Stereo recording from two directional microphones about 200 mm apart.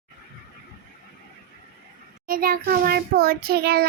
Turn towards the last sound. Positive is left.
turn(degrees=-50)  # may be behind; listen again after turning